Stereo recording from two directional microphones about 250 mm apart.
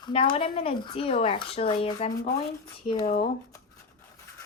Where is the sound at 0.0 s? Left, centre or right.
Centre.